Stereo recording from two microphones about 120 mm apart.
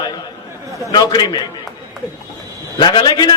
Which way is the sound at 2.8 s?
40° left (ahead or behind).